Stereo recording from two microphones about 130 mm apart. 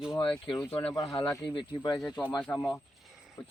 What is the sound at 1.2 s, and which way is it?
Speech, 25° left (ahead or behind).